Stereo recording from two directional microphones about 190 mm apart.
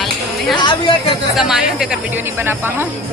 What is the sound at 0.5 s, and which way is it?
Speech, 25° left (ahead or behind).